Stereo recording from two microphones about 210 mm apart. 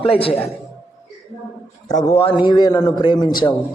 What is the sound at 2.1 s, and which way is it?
A man's voice, 30° left (ahead or behind).